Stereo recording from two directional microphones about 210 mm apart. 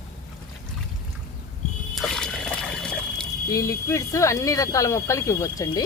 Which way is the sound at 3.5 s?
15° left (ahead or behind).